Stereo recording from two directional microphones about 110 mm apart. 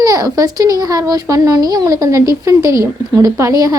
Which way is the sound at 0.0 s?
30° right (ahead or behind).